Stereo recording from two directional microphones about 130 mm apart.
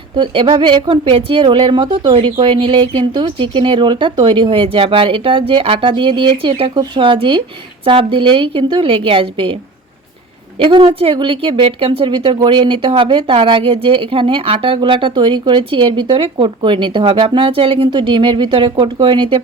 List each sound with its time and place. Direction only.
0.2 s a woman's voice: 45° right (ahead or behind)
10.6 s a woman's voice: 40° right (ahead or behind)